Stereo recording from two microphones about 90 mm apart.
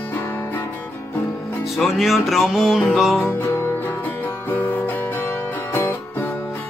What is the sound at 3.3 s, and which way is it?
Music, 30° left (ahead or behind).